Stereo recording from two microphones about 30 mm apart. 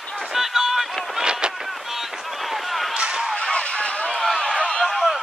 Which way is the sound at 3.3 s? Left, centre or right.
Left.